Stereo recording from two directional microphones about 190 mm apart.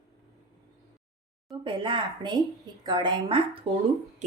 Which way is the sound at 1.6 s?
25° right (ahead or behind).